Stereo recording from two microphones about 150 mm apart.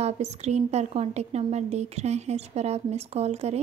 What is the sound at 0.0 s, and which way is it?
A woman's voice, 45° right (ahead or behind).